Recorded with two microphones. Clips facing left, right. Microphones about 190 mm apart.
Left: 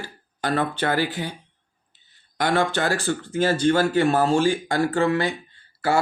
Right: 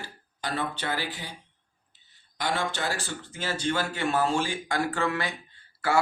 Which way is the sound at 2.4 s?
60° left (ahead or behind).